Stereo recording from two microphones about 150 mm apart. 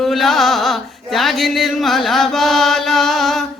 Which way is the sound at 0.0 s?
Centre (ahead or behind).